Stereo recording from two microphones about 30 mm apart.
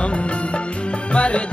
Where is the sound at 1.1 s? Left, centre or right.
Left.